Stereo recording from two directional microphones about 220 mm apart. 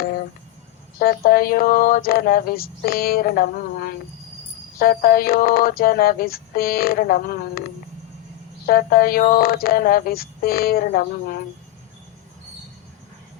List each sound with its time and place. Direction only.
0.9 s speech: 45° left (ahead or behind)
8.6 s speech: 40° left (ahead or behind)